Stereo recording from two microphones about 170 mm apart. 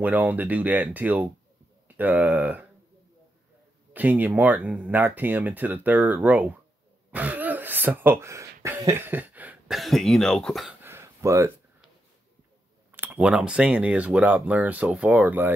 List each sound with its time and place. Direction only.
0.0 s speech: 10° right (ahead or behind)
3.9 s speech: 10° right (ahead or behind)
7.1 s a sound: 10° right (ahead or behind)
8.6 s speech: 15° right (ahead or behind); by 10.8 s centre (ahead or behind)
10.8 s a sound: 15° right (ahead or behind)
12.9 s speech: 10° right (ahead or behind)